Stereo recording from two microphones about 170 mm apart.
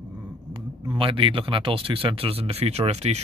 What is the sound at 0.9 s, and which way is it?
Speech, 30° right (ahead or behind).